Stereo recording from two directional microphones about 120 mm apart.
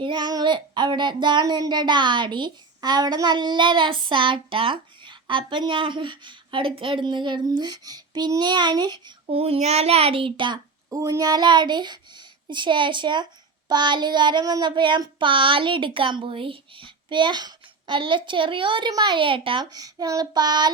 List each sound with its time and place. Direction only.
0.0 s child singing: 40° right (ahead or behind)
9.2 s speech: 55° right (ahead or behind)
10.8 s child singing: 25° right (ahead or behind); by 19.6 s 45° right (ahead or behind)
19.7 s child singing: 30° right (ahead or behind)